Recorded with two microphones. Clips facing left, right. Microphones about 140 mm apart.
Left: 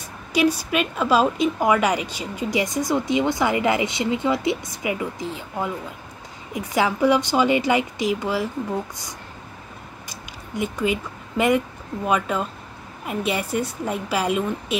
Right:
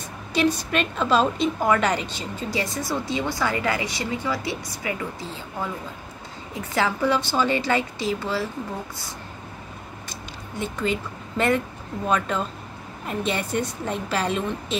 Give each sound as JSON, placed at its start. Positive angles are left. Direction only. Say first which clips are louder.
{"t": 0.3, "sound": "a woman's voice", "louder": "left 2 dB", "side_deg": 10}
{"t": 10.0, "sound": "a sound", "louder": "right 1 dB", "side_deg": 10}
{"t": 12.1, "sound": "a woman's voice", "louder": "left 2 dB", "side_deg": 5}